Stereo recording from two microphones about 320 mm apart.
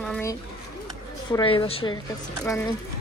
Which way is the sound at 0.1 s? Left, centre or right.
Centre.